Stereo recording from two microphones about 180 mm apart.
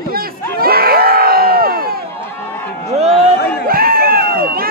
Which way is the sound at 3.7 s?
55° right (ahead or behind).